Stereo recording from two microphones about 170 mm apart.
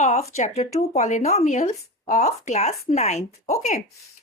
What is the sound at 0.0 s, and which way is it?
A woman's voice, 40° left (ahead or behind).